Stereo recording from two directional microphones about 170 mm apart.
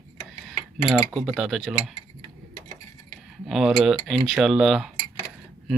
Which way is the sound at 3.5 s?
Centre (ahead or behind).